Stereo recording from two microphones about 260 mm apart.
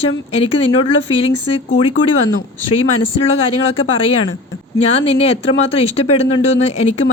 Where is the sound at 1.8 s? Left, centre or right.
Left.